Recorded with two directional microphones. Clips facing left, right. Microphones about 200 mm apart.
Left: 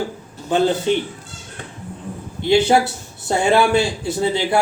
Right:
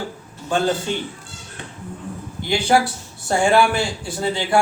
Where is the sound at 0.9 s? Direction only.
20° left (ahead or behind).